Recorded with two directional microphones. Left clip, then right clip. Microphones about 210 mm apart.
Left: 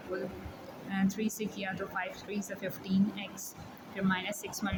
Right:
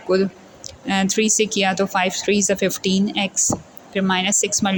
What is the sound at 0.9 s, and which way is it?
Speech, 40° right (ahead or behind).